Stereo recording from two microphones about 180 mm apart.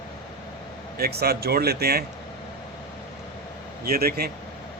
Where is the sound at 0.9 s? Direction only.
60° right (ahead or behind).